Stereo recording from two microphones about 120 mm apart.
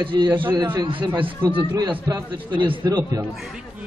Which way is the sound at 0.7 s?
40° right (ahead or behind).